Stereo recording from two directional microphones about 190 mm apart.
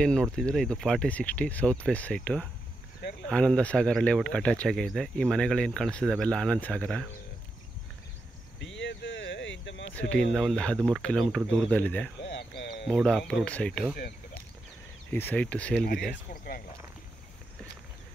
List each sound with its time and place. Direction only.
0.0 s speech: 5° left (ahead or behind)
3.0 s cricket: 60° left (ahead or behind)
3.3 s speech: 5° left (ahead or behind)
8.5 s a sound: 75° left (ahead or behind)
9.9 s speech: 5° left (ahead or behind)
12.2 s a sound: 65° left (ahead or behind)
12.8 s speech: 5° left (ahead or behind)
15.0 s speech: 10° left (ahead or behind)